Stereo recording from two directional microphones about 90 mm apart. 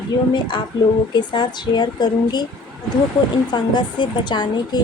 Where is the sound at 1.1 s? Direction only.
55° left (ahead or behind).